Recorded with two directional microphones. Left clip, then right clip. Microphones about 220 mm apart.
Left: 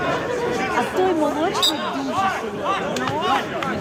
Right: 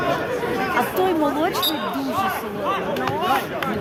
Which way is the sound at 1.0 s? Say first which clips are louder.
Left 1 dB; 35° right (ahead or behind).